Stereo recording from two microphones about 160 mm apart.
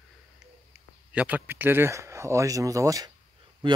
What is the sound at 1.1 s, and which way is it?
Speech, 10° right (ahead or behind).